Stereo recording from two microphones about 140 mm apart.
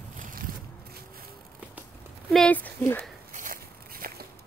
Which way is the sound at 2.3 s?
10° left (ahead or behind).